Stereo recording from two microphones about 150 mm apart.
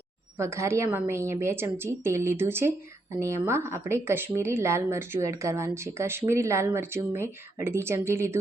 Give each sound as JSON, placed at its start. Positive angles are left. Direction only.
{"t": 0.3, "sound": "speech", "side_deg": -20}